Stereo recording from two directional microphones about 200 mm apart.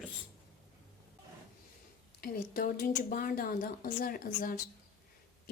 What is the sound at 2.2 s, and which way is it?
A woman's voice, 45° left (ahead or behind).